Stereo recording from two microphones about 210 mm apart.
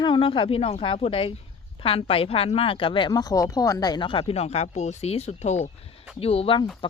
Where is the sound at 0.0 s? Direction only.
25° left (ahead or behind).